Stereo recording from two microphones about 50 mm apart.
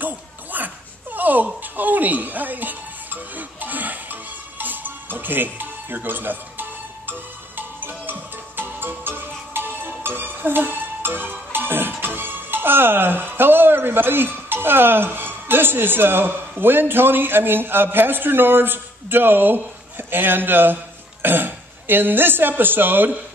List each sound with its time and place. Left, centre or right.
0.0 s a sound: right
1.1 s music: right
12.0 s speech: right